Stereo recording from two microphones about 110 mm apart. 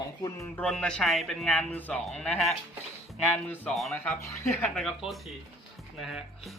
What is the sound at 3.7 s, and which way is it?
Speech, centre (ahead or behind).